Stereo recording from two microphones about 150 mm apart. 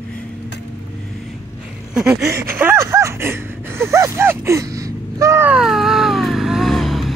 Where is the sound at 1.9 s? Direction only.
5° right (ahead or behind).